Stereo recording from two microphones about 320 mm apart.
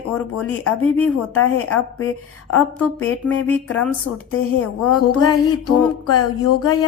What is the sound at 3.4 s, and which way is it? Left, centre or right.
Speech, centre.